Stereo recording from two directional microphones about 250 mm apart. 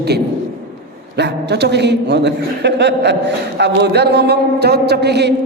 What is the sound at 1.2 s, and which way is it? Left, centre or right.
A man's voice, right.